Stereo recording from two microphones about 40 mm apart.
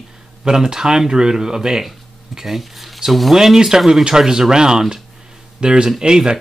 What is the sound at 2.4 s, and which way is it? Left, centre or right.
Speech, centre.